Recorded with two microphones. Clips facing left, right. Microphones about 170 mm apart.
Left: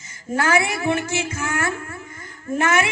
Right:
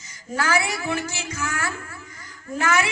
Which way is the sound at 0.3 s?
50° left (ahead or behind).